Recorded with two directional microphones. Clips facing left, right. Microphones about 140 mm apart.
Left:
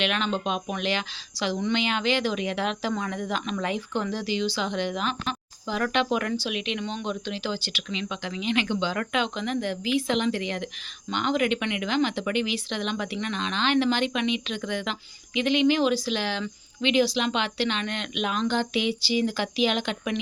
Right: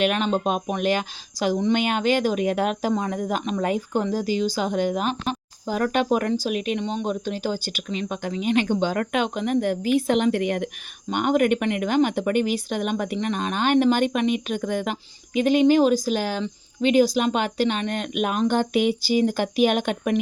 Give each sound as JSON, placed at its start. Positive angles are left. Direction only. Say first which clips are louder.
{"t": 0.0, "sound": "speech", "louder": "right 5 dB", "side_deg": -40}